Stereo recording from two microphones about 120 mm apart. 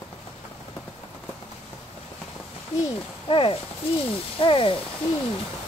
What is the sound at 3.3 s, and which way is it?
A child's voice, 45° left (ahead or behind).